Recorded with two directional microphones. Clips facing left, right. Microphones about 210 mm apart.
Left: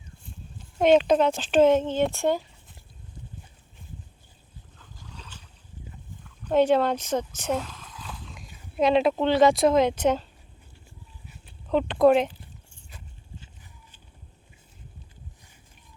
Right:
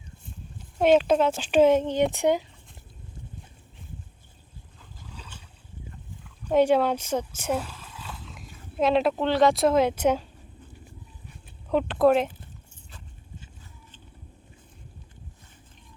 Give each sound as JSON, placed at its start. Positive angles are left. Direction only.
{"t": 0.8, "sound": "speech", "side_deg": -5}
{"t": 6.4, "sound": "speech", "side_deg": -10}
{"t": 11.7, "sound": "speech", "side_deg": -5}